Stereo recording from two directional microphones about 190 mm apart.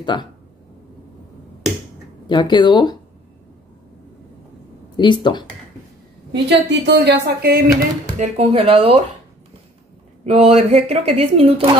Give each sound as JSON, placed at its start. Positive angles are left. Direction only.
{"t": 0.0, "sound": "speech", "side_deg": 25}
{"t": 2.2, "sound": "speech", "side_deg": 25}
{"t": 4.9, "sound": "speech", "side_deg": 25}
{"t": 6.3, "sound": "a woman's voice", "side_deg": -65}
{"t": 7.4, "sound": "speech", "side_deg": -55}
{"t": 8.2, "sound": "speech", "side_deg": -30}
{"t": 10.2, "sound": "speech", "side_deg": -30}